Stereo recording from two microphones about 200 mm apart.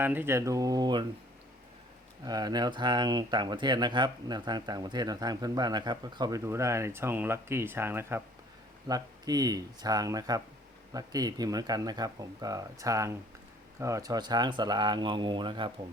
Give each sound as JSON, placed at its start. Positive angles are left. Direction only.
{"t": 0.0, "sound": "speech", "side_deg": -10}
{"t": 2.2, "sound": "speech", "side_deg": -20}